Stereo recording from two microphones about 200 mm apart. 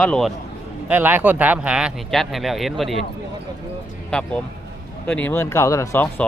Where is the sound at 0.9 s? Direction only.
10° right (ahead or behind).